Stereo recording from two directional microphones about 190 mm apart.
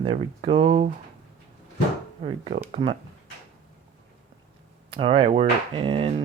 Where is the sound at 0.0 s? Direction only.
30° right (ahead or behind).